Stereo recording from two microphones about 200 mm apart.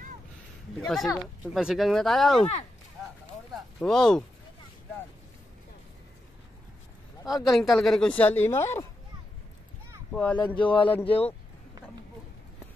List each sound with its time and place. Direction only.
0.7 s a woman's voice: centre (ahead or behind)
3.5 s speech: centre (ahead or behind)
7.5 s a woman's voice: centre (ahead or behind)
10.1 s speech: 5° left (ahead or behind)
10.7 s speech: 25° left (ahead or behind)
11.0 s speech: 10° left (ahead or behind)